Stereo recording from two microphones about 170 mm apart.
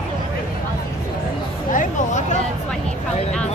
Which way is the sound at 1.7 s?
45° left (ahead or behind).